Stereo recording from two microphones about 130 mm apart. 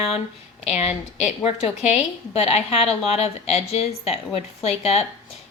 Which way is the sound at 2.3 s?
55° left (ahead or behind).